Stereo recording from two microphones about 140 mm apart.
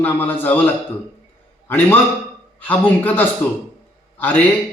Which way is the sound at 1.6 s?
15° left (ahead or behind).